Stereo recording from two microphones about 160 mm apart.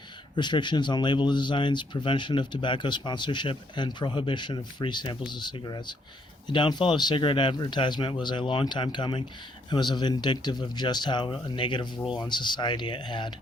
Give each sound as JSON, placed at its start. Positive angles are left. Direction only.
{"t": 0.3, "sound": "speech", "side_deg": 30}